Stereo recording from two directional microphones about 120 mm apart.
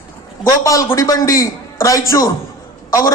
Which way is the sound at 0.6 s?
25° left (ahead or behind).